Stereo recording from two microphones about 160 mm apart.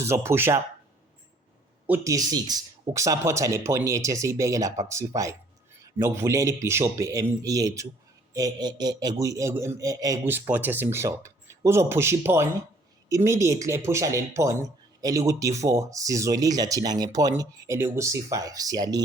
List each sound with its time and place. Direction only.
0.0 s a man's voice: 15° right (ahead or behind)
1.9 s a man's voice: 20° right (ahead or behind)